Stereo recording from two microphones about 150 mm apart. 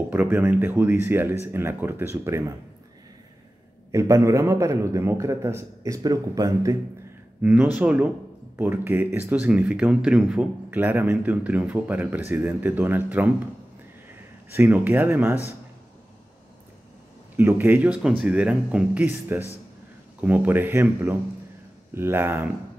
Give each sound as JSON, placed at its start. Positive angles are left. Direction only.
{"t": 0.1, "sound": "speech", "side_deg": -15}
{"t": 3.9, "sound": "a man's voice", "side_deg": -20}
{"t": 7.4, "sound": "speech", "side_deg": -10}
{"t": 14.5, "sound": "speech", "side_deg": -15}
{"t": 17.4, "sound": "speech", "side_deg": -15}